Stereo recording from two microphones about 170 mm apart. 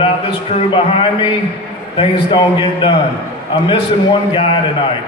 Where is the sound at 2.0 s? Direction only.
30° left (ahead or behind).